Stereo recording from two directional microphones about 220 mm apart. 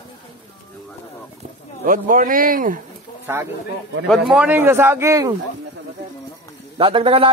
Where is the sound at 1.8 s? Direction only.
40° right (ahead or behind).